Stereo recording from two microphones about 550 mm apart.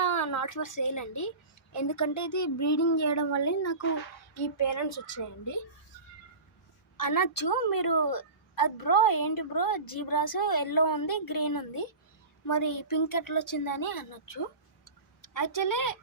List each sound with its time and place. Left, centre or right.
0.0 s a woman's voice: left
6.9 s a woman's voice: left
14.8 s tick-tock: left